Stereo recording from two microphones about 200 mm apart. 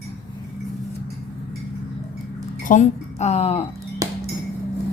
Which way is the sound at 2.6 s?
35° left (ahead or behind).